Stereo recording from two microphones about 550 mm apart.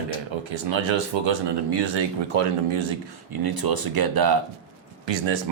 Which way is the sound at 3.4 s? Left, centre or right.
Right.